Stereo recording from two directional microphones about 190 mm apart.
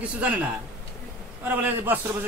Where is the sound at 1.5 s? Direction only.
10° right (ahead or behind).